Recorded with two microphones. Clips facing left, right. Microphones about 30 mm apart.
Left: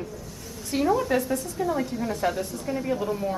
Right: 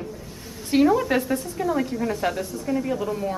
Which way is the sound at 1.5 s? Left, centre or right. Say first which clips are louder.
Right 3 dB; centre.